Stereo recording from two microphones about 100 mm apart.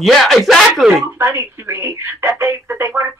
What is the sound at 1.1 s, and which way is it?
Speech, 25° right (ahead or behind).